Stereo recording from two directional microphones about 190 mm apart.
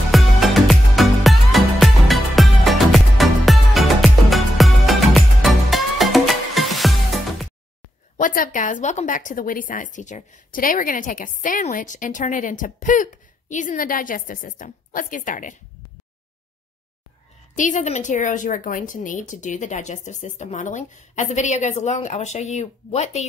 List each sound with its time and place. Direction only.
0.1 s music: centre (ahead or behind)
8.2 s a woman's voice: 45° left (ahead or behind)
17.6 s a woman's voice: 40° left (ahead or behind)